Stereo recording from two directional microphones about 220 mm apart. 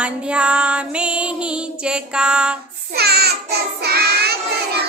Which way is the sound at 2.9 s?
45° right (ahead or behind).